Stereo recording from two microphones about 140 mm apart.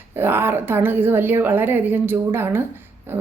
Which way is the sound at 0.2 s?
15° right (ahead or behind).